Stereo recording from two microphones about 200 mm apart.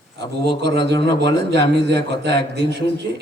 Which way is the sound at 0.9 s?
55° right (ahead or behind).